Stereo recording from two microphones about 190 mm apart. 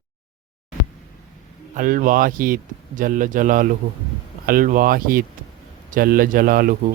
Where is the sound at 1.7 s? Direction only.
45° right (ahead or behind).